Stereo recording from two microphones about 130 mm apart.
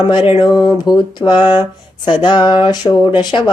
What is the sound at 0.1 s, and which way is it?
Speech, 40° left (ahead or behind).